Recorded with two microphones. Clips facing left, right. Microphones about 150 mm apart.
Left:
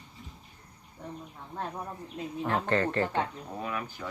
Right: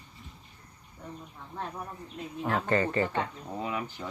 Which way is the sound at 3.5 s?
20° right (ahead or behind).